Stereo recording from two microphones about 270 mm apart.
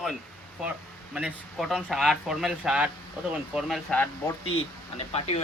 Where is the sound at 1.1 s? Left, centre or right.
Centre.